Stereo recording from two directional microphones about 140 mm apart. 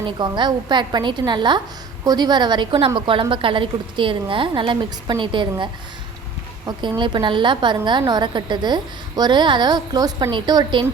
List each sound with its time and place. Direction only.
0.0 s a woman's voice: 35° right (ahead or behind)
6.7 s a woman's voice: 35° right (ahead or behind)